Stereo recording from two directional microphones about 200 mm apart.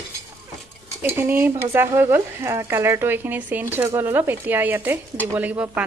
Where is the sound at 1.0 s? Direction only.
10° right (ahead or behind).